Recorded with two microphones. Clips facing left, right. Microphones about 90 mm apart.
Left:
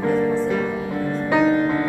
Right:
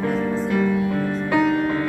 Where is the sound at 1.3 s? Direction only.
20° left (ahead or behind).